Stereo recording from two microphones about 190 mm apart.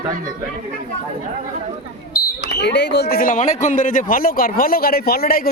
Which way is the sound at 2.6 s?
65° left (ahead or behind).